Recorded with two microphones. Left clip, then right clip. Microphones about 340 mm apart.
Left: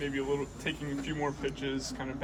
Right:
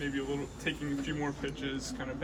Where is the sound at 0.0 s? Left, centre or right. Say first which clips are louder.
Left 3 dB; centre.